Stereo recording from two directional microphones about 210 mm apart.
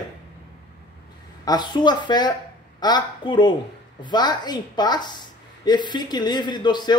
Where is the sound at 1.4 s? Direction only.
20° left (ahead or behind).